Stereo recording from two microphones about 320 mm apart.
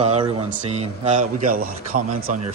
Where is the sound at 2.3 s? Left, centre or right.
Right.